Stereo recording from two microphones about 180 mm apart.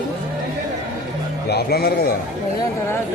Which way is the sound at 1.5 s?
60° left (ahead or behind).